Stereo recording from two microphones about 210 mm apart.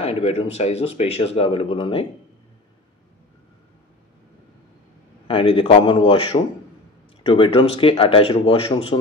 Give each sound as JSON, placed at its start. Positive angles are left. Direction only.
{"t": 0.0, "sound": "speech", "side_deg": 30}
{"t": 5.3, "sound": "speech", "side_deg": 25}